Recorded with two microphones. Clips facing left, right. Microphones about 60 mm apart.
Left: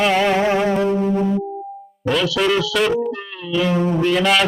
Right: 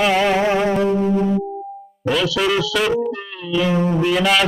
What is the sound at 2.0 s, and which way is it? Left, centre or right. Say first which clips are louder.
Speech: even; centre.